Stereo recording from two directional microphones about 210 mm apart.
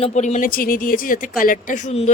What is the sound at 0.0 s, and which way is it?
A woman's voice, 35° left (ahead or behind).